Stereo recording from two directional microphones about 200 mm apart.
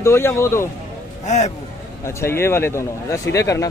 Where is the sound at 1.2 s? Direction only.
35° left (ahead or behind).